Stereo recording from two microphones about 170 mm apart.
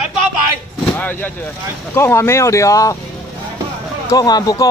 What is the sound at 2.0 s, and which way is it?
Speech, 15° left (ahead or behind).